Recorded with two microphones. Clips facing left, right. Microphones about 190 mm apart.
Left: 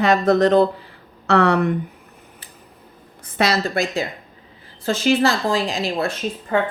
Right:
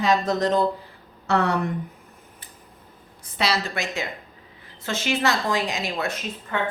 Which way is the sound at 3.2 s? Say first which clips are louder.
Left 5 dB; 50° left (ahead or behind).